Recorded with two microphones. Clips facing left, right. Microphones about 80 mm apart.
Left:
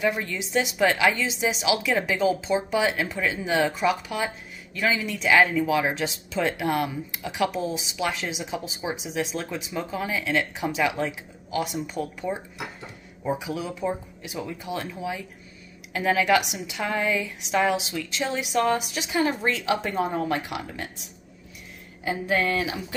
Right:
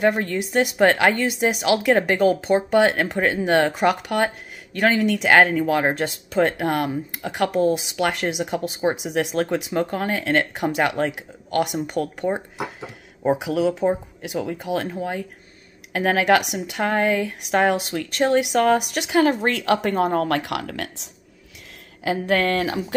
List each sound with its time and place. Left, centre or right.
0.0 s speech: right
22.0 s speech: right